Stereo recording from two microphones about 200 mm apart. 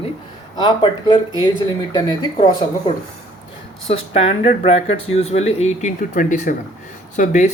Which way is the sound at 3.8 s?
30° left (ahead or behind).